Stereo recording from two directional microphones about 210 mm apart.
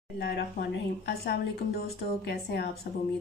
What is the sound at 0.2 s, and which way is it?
Speech, 50° left (ahead or behind).